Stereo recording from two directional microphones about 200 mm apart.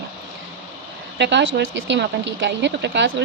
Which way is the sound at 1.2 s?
60° right (ahead or behind).